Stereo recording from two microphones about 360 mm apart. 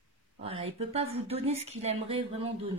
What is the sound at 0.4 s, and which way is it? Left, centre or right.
Speech, centre.